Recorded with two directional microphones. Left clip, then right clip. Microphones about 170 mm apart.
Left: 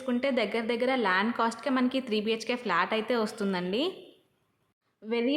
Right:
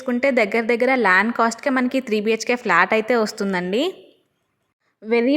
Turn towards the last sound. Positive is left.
turn(degrees=-45)  # may be behind; listen again after turning